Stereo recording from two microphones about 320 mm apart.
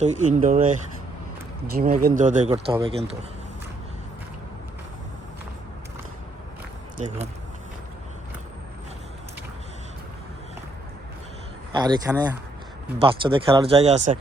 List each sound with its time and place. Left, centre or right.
0.0 s speech: right
11.7 s speech: centre